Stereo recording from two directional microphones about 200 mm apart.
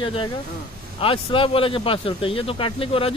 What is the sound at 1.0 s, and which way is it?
A man's voice, 25° left (ahead or behind).